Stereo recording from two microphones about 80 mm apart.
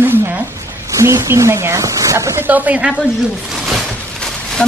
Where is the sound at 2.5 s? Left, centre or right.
Centre.